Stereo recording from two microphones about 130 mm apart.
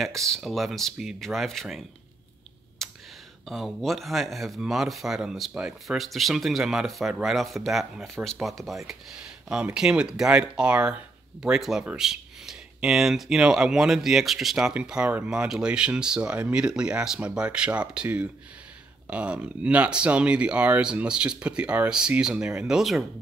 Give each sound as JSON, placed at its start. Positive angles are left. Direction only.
{"t": 0.0, "sound": "speech", "side_deg": 5}
{"t": 2.8, "sound": "a sound", "side_deg": 0}
{"t": 3.4, "sound": "speech", "side_deg": 0}